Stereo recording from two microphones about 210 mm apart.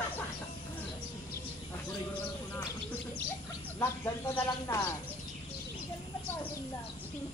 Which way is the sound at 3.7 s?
15° left (ahead or behind).